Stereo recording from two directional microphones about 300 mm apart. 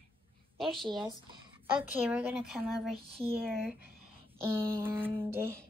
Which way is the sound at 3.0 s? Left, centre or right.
Centre.